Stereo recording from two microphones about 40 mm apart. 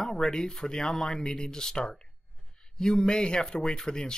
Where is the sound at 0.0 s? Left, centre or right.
Centre.